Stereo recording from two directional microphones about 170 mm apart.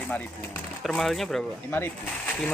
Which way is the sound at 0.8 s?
Centre (ahead or behind).